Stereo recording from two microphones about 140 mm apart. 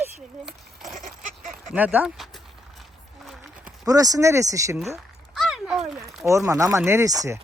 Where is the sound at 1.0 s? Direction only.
70° right (ahead or behind).